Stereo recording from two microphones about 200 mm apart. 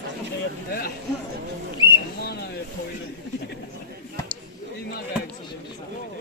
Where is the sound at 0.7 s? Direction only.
50° left (ahead or behind).